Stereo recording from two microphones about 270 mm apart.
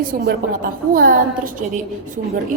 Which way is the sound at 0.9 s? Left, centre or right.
Right.